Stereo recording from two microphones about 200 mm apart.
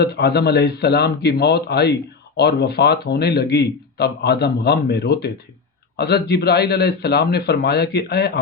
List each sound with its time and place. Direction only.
0.0 s speech: 55° left (ahead or behind)